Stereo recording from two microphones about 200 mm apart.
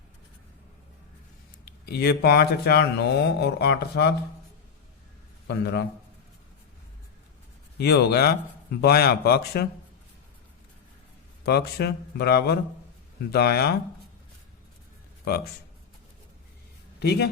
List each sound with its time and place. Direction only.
1.8 s speech: 55° left (ahead or behind)
5.5 s a man's voice: 55° left (ahead or behind)
7.8 s speech: 55° left (ahead or behind)
11.4 s speech: 55° left (ahead or behind)
17.0 s speech: 55° left (ahead or behind)